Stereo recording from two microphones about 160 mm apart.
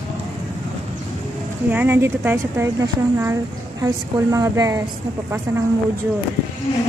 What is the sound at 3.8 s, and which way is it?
A woman's voice, 20° right (ahead or behind).